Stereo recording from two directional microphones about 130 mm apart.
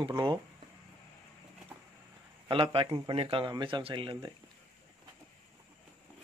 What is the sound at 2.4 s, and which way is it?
A man's voice, 40° right (ahead or behind).